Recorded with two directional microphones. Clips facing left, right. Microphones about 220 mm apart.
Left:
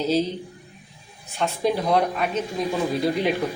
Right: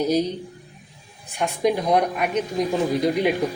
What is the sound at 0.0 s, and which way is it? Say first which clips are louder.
Speech: right 1 dB; 15° right (ahead or behind).